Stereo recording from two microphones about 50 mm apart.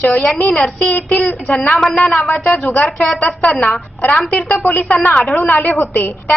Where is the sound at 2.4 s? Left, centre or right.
Left.